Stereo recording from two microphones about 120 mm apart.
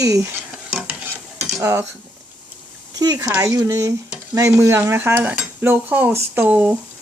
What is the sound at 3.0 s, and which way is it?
Speech, 30° right (ahead or behind).